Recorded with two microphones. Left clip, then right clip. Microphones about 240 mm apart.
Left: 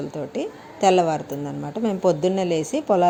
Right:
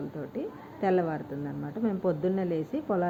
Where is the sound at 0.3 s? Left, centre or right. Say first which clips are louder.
Left 9 dB; left.